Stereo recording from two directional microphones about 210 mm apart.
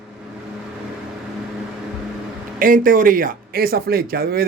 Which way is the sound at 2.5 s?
40° right (ahead or behind).